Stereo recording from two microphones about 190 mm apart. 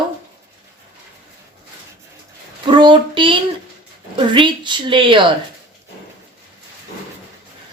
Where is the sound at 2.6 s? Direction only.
25° right (ahead or behind).